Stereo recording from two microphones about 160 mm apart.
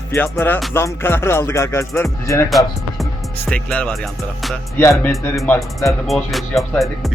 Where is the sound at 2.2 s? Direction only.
20° left (ahead or behind).